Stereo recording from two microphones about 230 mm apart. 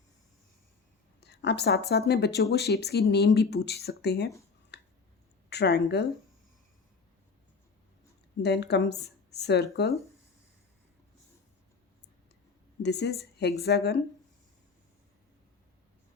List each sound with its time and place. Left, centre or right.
1.2 s speech: left
4.7 s a sound: left
5.5 s a woman's voice: left
8.4 s speech: left
12.8 s speech: left